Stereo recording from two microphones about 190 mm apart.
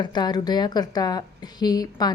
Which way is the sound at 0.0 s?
20° left (ahead or behind).